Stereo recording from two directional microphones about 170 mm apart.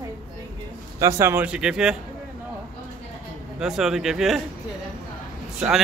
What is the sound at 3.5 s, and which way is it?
Speech, 5° right (ahead or behind).